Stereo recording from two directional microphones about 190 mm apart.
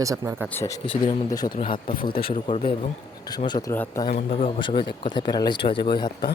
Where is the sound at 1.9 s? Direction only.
50° left (ahead or behind).